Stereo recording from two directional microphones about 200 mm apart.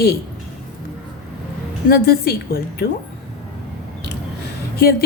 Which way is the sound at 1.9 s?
50° left (ahead or behind).